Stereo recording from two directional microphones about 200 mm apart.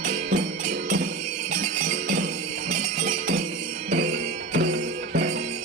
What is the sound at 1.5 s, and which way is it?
Jingle bell, 40° right (ahead or behind).